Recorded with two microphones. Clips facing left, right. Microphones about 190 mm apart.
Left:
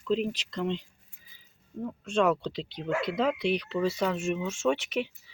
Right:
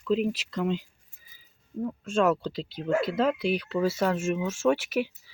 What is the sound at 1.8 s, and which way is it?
Speech, 5° right (ahead or behind).